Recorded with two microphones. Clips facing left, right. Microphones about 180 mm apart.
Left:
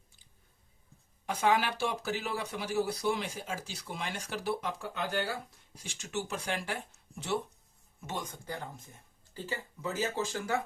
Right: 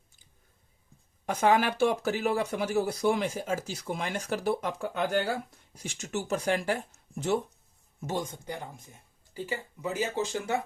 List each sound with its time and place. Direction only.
1.3 s speech: 50° right (ahead or behind)
8.3 s speech: 20° right (ahead or behind)